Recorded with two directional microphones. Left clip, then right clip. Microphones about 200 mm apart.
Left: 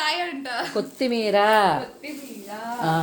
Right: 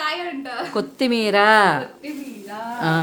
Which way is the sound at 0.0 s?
Centre (ahead or behind).